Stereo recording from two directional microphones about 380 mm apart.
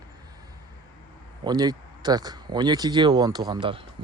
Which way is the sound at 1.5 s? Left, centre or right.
Centre.